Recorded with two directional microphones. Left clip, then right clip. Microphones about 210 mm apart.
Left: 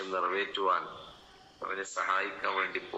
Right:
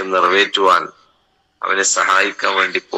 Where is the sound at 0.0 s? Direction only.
55° right (ahead or behind).